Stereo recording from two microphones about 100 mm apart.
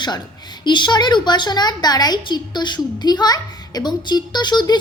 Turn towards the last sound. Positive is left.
turn(degrees=45)  # may be behind; listen again after turning